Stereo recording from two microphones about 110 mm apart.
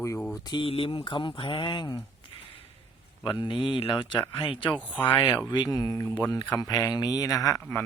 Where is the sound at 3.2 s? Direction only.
45° left (ahead or behind).